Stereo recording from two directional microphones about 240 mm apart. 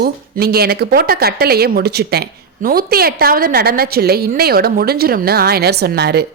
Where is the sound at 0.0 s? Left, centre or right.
Right.